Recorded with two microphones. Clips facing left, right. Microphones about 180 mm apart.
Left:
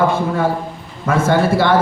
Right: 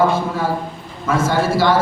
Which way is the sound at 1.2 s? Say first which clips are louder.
Left 2 dB; 60° left (ahead or behind).